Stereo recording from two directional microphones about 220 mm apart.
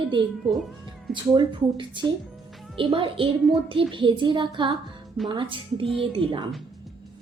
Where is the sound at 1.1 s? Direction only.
20° right (ahead or behind).